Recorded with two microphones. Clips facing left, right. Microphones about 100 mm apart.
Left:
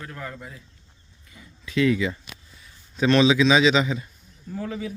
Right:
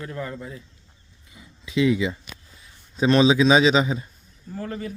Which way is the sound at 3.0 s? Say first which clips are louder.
Right 1 dB; 35° right (ahead or behind).